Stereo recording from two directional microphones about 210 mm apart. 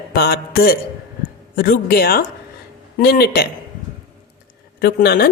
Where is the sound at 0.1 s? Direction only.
45° left (ahead or behind).